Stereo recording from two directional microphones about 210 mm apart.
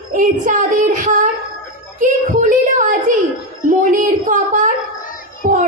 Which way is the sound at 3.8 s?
35° right (ahead or behind).